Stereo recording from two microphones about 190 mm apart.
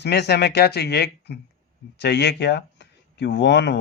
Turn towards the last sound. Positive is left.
turn(degrees=65)  # may be behind; listen again after turning